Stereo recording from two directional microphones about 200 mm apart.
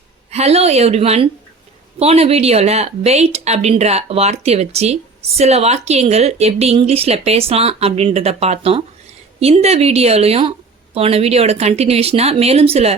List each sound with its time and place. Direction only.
0.3 s speech: 30° right (ahead or behind)